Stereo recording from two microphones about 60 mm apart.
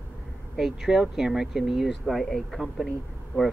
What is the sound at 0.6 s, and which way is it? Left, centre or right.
Speech, centre.